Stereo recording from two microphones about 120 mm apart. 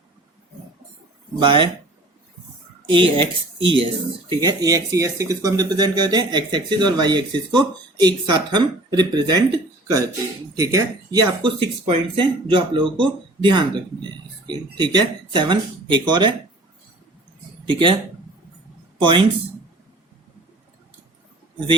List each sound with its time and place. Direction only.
1.4 s speech: 45° right (ahead or behind)
2.9 s speech: 45° right (ahead or behind)
4.4 s speech: 30° right (ahead or behind)
11.4 s speech: 45° right (ahead or behind)
17.7 s speech: 45° right (ahead or behind)
18.9 s speech: 45° right (ahead or behind)